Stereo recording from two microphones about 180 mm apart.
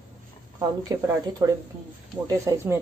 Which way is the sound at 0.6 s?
20° right (ahead or behind).